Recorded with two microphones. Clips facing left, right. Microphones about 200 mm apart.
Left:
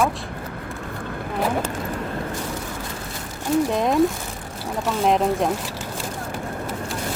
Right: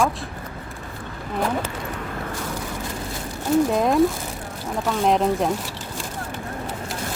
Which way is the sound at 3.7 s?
Centre (ahead or behind).